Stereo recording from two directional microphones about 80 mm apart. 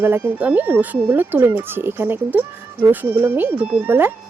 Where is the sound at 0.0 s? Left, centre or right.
Right.